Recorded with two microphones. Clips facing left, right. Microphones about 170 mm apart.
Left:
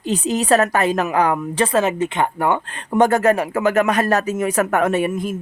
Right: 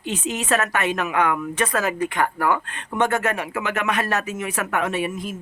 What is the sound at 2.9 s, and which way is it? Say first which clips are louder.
Speech: left 7 dB; 35° left (ahead or behind).